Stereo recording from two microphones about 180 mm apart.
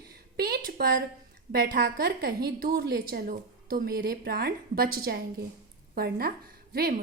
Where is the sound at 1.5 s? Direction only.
60° right (ahead or behind).